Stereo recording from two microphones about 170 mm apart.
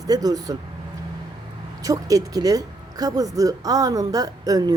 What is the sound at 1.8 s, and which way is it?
Speech, 20° right (ahead or behind).